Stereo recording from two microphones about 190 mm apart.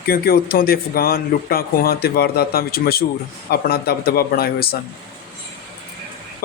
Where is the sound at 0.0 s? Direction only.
50° left (ahead or behind).